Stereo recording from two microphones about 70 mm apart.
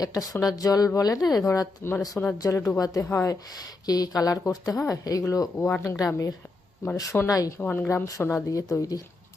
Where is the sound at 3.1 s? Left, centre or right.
Left.